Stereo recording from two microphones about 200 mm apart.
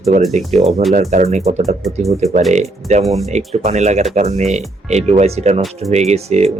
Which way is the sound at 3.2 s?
35° right (ahead or behind).